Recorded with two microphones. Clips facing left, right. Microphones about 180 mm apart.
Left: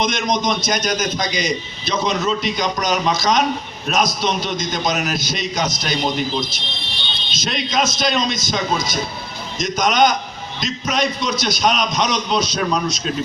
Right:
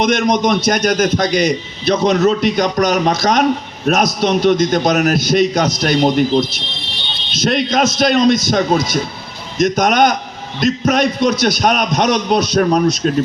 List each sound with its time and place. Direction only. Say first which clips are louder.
0.0 s a man's voice: right 6 dB; 60° right (ahead or behind)
7.3 s a man's voice: right 6 dB; 60° right (ahead or behind)